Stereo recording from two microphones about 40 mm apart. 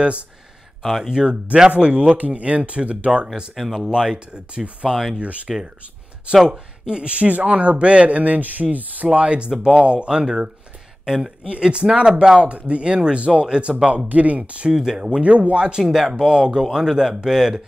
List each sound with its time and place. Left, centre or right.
1.0 s speech: right
3.5 s speech: centre
3.9 s speech: right
4.8 s speech: centre
6.9 s speech: right
13.8 s speech: right
14.7 s speech: centre
15.0 s speech: right
15.5 s speech: right
15.8 s speech: centre
16.1 s speech: right